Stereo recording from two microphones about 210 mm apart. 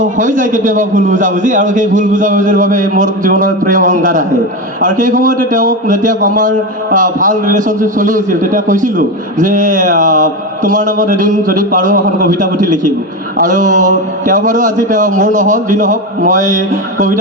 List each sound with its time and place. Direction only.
0.0 s a man's voice: 35° right (ahead or behind)